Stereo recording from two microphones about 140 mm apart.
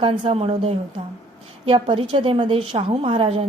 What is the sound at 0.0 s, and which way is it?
A woman's voice, 40° right (ahead or behind).